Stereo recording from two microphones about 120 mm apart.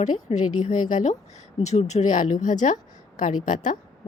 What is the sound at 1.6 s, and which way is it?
Speech, 70° left (ahead or behind).